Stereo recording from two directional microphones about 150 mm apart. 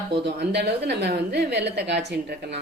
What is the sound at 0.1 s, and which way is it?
A woman's voice, 90° right.